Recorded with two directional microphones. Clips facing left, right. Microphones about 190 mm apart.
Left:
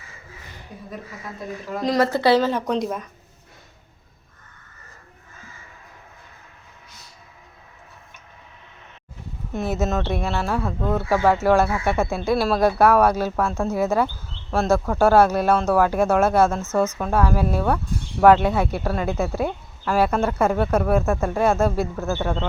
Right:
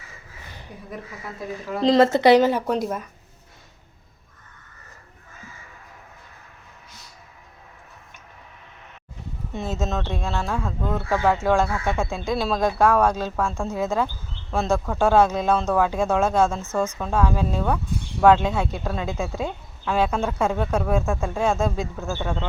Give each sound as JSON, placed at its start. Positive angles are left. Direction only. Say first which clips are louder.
{"t": 1.8, "sound": "speech", "louder": "right 4 dB", "side_deg": -25}
{"t": 9.5, "sound": "a woman's voice", "louder": "left 4 dB", "side_deg": 5}